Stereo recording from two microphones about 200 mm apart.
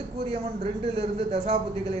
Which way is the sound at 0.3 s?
30° right (ahead or behind).